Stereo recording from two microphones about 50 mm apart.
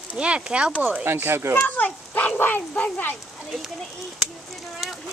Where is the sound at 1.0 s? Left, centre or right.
Right.